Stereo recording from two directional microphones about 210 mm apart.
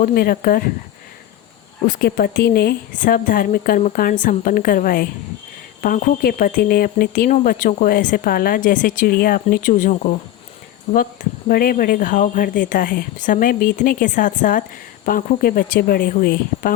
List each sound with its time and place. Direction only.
0.0 s a woman's voice: 45° left (ahead or behind)
1.9 s a woman's voice: 45° left (ahead or behind)